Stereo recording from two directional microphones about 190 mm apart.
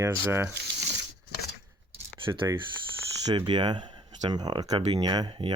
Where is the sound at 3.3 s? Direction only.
25° right (ahead or behind).